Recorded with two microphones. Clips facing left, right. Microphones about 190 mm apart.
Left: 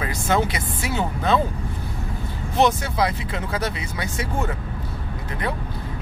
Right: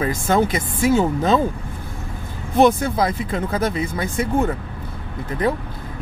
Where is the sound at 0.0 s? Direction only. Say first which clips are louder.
Right 4 dB; 45° right (ahead or behind).